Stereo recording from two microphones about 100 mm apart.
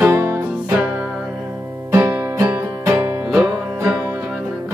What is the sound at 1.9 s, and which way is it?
Music, 25° right (ahead or behind).